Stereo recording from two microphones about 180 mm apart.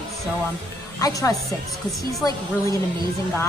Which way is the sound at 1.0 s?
20° left (ahead or behind).